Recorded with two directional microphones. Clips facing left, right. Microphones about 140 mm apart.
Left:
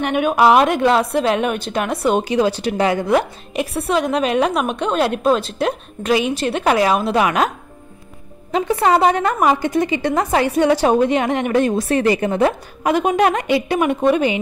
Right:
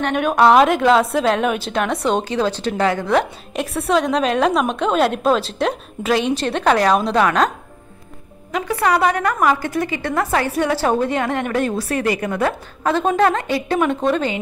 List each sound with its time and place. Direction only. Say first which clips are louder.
0.0 s a woman's voice: even; 5° left (ahead or behind)
8.5 s a woman's voice: left 3 dB; 25° left (ahead or behind)